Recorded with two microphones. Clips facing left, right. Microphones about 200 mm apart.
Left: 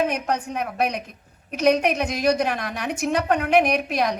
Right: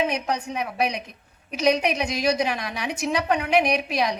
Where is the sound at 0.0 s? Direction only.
55° left (ahead or behind).